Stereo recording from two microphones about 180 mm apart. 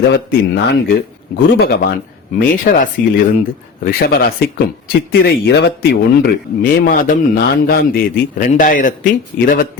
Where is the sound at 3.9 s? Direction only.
55° left (ahead or behind).